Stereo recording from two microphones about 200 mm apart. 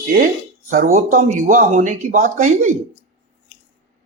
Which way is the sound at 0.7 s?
45° right (ahead or behind).